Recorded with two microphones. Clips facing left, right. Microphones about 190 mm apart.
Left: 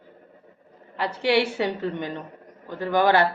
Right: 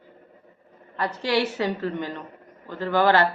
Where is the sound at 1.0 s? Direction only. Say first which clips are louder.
Left 2 dB; 10° left (ahead or behind).